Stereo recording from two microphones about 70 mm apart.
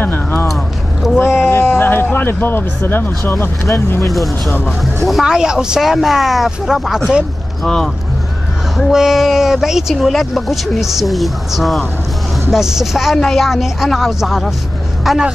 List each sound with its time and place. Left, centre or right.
0.0 s speech: left
1.0 s speech: centre
1.4 s a sound: left
4.1 s speech: centre
5.2 s speech: centre
7.6 s speech: centre
8.7 s speech: centre